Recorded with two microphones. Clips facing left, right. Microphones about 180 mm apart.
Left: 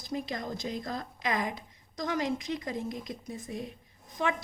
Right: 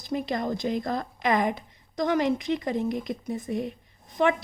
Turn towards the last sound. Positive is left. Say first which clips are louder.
# right 8 dB
turn(degrees=-70)  # may be behind; listen again after turning